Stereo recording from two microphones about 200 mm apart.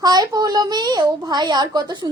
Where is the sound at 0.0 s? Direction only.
20° right (ahead or behind).